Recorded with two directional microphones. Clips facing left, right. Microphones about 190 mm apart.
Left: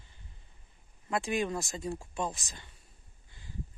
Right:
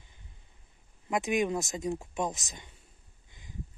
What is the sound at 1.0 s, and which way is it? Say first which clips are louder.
Speech: right 3 dB; 15° right (ahead or behind).